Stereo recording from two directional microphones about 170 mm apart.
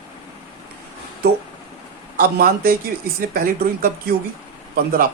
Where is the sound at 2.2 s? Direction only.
60° right (ahead or behind).